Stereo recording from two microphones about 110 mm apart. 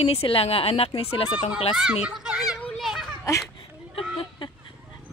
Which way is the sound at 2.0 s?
5° right (ahead or behind).